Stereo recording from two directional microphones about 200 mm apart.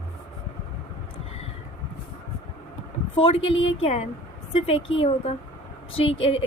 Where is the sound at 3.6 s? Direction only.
75° left (ahead or behind).